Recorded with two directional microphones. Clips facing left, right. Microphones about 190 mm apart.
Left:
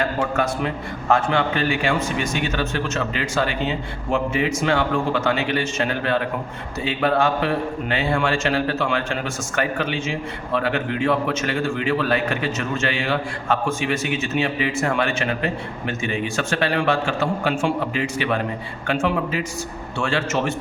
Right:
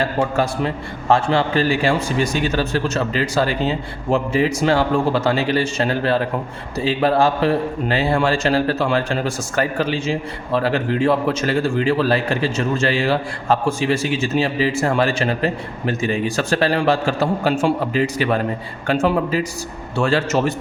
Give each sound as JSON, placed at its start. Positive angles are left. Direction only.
{"t": 0.0, "sound": "a man's voice", "side_deg": -30}